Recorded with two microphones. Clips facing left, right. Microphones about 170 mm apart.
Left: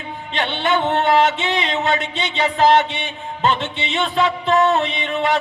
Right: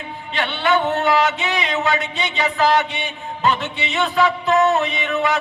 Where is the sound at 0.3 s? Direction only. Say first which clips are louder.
Right 1 dB; 25° left (ahead or behind).